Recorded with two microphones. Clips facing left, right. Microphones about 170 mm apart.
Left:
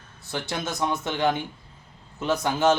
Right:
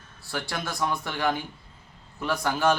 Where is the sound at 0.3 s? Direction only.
20° left (ahead or behind).